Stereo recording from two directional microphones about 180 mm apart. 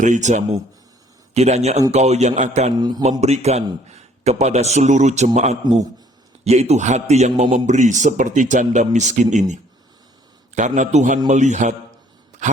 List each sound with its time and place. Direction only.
0.0 s a man's voice: 45° right (ahead or behind)
2.7 s speech: 25° right (ahead or behind)
3.0 s a man's voice: 40° right (ahead or behind)